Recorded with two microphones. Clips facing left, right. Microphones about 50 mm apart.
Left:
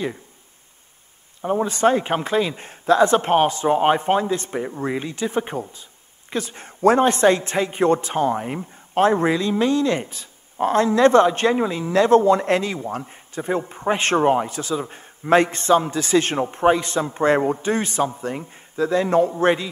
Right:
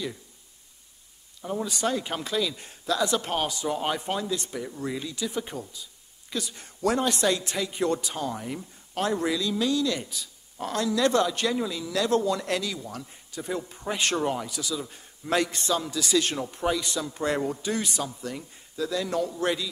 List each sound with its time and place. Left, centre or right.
1.4 s a man's voice: left